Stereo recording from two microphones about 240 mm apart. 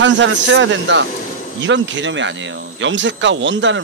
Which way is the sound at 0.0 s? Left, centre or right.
Right.